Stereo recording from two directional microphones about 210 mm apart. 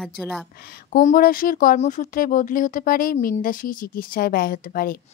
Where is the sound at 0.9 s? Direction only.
45° left (ahead or behind).